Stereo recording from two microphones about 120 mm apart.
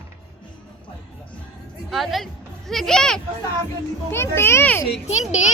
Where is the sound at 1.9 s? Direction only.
Centre (ahead or behind).